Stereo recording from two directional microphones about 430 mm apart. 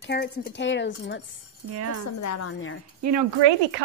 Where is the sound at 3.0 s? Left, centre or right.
Right.